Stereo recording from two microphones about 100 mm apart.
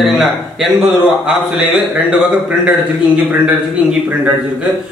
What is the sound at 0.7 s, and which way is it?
Speech, 15° right (ahead or behind).